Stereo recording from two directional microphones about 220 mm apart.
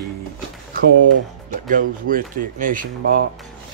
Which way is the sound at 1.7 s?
40° right (ahead or behind).